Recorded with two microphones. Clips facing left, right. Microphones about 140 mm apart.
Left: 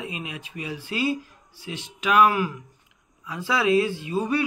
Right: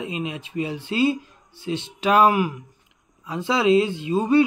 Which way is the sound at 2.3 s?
15° right (ahead or behind).